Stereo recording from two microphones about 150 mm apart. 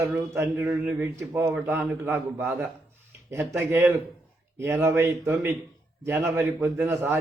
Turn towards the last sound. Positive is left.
turn(degrees=-15)  # may be behind; listen again after turning